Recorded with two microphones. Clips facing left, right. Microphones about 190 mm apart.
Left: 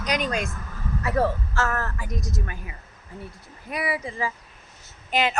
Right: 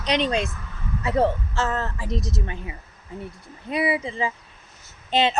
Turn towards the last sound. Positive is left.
turn(degrees=-25)  # may be behind; listen again after turning